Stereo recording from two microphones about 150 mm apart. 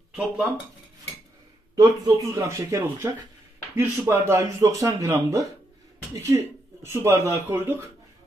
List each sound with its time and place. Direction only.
1.8 s speech: 25° right (ahead or behind)